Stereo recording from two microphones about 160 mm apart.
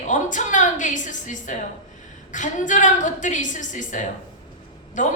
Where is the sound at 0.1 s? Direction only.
50° left (ahead or behind).